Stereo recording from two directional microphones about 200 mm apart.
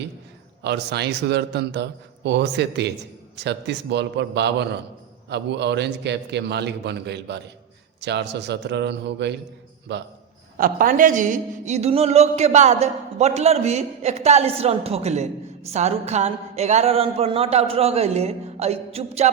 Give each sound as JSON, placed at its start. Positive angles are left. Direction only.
{"t": 0.6, "sound": "a man's voice", "side_deg": -60}
{"t": 10.6, "sound": "a woman's voice", "side_deg": -45}